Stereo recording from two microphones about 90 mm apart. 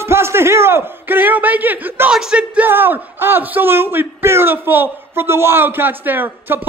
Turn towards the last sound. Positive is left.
turn(degrees=-20)  # may be behind; listen again after turning